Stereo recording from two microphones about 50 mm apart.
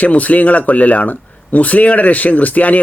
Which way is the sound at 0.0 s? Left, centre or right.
Left.